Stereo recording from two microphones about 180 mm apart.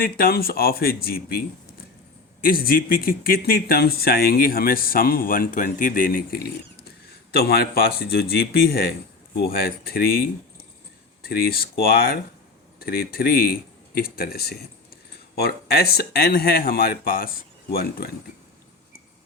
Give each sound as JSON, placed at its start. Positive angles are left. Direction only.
{"t": 0.0, "sound": "speech", "side_deg": 55}